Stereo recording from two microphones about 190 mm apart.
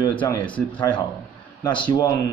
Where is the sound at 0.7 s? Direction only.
25° left (ahead or behind).